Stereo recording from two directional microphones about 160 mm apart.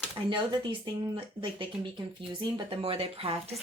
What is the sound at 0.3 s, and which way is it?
Speech, 30° right (ahead or behind).